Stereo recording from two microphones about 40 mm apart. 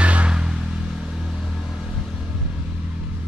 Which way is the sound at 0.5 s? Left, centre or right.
Centre.